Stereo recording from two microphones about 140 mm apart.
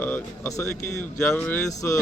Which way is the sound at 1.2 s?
5° left (ahead or behind).